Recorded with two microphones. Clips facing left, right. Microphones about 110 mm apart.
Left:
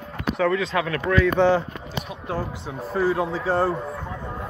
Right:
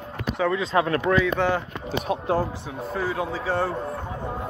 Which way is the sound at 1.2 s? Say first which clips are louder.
Left 4 dB; centre (ahead or behind).